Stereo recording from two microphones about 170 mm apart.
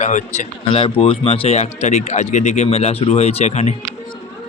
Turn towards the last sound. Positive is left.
turn(degrees=40)  # may be behind; listen again after turning